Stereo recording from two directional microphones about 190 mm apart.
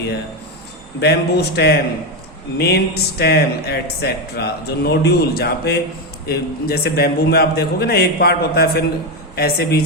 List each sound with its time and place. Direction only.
0.9 s speech: 60° left (ahead or behind)